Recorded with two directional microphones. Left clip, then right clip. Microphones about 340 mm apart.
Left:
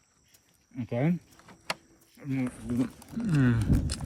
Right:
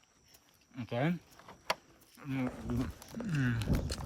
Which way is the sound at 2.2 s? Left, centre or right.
Centre.